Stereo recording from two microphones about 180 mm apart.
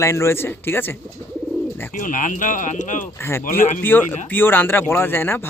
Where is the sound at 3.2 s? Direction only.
15° left (ahead or behind).